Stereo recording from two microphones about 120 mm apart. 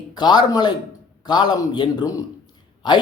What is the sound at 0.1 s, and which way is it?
Speech, 35° left (ahead or behind).